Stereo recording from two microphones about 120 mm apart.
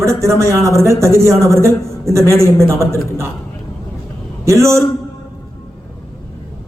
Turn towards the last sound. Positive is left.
turn(degrees=-25)  # may be behind; listen again after turning